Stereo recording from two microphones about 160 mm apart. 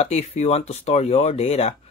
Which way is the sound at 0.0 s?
40° left (ahead or behind).